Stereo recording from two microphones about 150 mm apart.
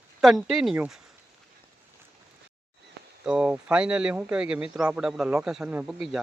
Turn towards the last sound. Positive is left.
turn(degrees=-5)  # may be behind; listen again after turning